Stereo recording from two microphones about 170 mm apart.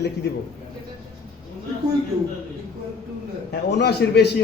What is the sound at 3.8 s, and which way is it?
Speech, 75° left (ahead or behind).